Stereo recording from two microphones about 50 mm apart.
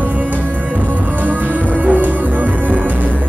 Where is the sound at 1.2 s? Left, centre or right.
Right.